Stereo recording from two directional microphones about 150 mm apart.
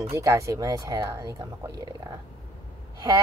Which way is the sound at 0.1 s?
20° right (ahead or behind).